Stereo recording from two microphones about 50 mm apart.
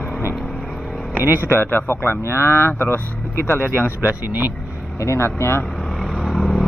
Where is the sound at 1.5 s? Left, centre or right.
Left.